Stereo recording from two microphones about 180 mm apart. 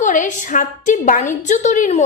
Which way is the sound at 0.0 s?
45° left (ahead or behind).